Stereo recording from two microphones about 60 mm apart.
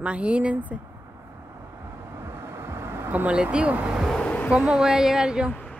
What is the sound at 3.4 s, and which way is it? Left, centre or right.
Speech, centre.